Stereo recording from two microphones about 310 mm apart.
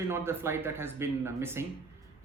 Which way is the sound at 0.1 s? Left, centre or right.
Centre.